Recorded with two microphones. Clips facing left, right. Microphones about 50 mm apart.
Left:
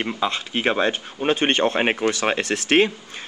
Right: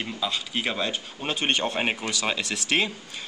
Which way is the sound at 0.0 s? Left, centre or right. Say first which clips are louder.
Left 6 dB; left.